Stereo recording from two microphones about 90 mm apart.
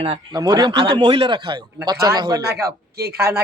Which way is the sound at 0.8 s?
65° right (ahead or behind).